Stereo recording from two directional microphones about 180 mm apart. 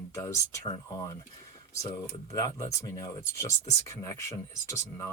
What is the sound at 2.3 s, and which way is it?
Speech, 20° left (ahead or behind).